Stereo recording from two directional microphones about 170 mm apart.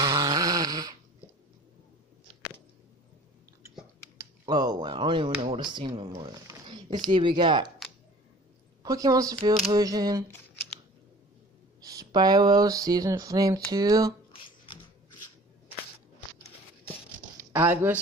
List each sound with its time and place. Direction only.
0.0 s dog: 20° right (ahead or behind)
4.2 s speech: 25° right (ahead or behind)
8.8 s speech: 20° right (ahead or behind)
11.8 s speech: 20° right (ahead or behind)
17.4 s speech: 15° right (ahead or behind)